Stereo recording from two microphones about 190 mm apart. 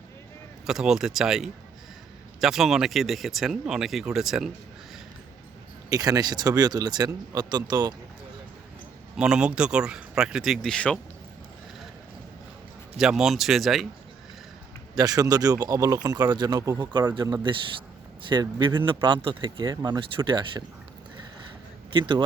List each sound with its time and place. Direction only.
0.7 s speech: centre (ahead or behind)
5.9 s speech: 20° right (ahead or behind)
9.1 s speech: 5° right (ahead or behind)
13.0 s speech: 5° right (ahead or behind)
14.9 s speech: 20° right (ahead or behind)
21.9 s speech: 25° right (ahead or behind)